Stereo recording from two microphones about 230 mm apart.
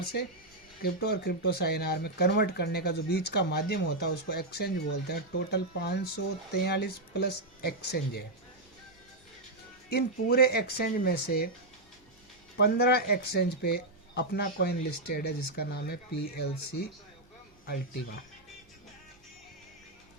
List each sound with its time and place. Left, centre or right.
0.8 s speech: left
9.9 s speech: left
12.5 s speech: left